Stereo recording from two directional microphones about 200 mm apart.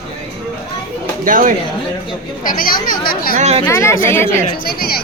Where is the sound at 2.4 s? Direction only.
45° left (ahead or behind).